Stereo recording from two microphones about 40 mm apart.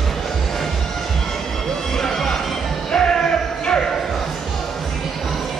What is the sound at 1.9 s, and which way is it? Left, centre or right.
Music, centre.